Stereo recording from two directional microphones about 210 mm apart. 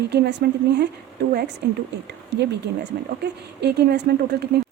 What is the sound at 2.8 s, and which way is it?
A woman's voice, 50° right (ahead or behind).